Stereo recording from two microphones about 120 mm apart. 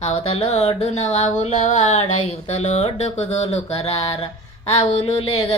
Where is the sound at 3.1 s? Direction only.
60° left (ahead or behind).